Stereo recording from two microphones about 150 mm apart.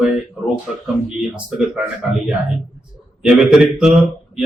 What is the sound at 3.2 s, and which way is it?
Speech, 5° right (ahead or behind).